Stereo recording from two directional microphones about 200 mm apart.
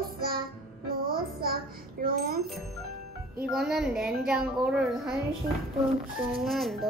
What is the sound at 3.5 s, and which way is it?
Speech, centre (ahead or behind).